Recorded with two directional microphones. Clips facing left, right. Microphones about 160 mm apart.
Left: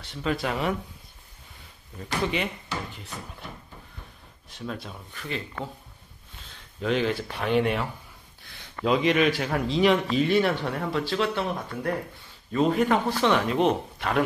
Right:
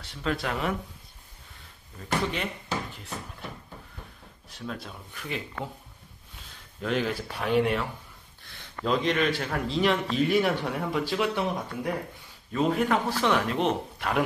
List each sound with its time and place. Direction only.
0.1 s a man's voice: 5° left (ahead or behind)
4.6 s a man's voice: centre (ahead or behind)
6.4 s speech: centre (ahead or behind)
8.8 s a man's voice: 5° left (ahead or behind); by 11.9 s 10° right (ahead or behind)
12.5 s a man's voice: centre (ahead or behind)